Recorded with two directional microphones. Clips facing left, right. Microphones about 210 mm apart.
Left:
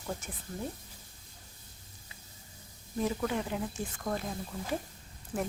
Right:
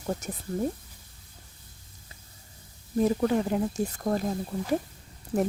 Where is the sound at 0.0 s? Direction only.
40° right (ahead or behind).